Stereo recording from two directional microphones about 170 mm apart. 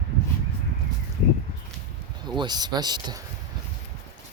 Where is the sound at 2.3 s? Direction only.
25° right (ahead or behind).